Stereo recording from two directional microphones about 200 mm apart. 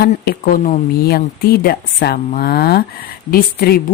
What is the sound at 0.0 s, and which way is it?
Speech, 50° left (ahead or behind).